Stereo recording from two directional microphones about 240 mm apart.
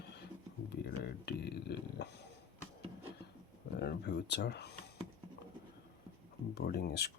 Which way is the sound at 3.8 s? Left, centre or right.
Left.